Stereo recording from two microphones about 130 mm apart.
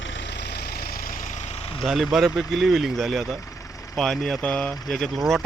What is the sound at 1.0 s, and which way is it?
Vehicle, 90° left.